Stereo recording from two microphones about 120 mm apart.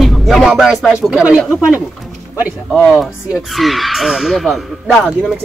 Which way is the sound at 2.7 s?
5° right (ahead or behind).